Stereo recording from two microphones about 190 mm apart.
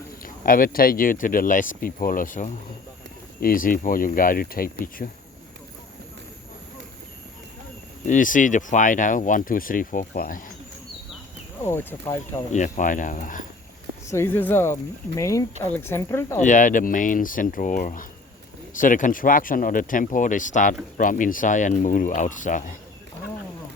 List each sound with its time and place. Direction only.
0.4 s speech: 50° left (ahead or behind)
8.0 s speech: 45° left (ahead or behind)
11.6 s speech: 10° left (ahead or behind)
12.5 s speech: 40° left (ahead or behind)
14.1 s speech: 10° left (ahead or behind)
16.4 s speech: 40° left (ahead or behind)